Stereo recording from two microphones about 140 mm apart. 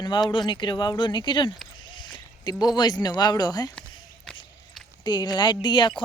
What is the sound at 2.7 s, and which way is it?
Speech, 30° left (ahead or behind).